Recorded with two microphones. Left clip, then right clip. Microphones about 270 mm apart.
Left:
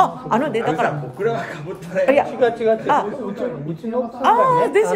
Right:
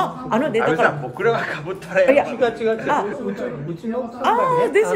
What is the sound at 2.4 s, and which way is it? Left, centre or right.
Speech, left.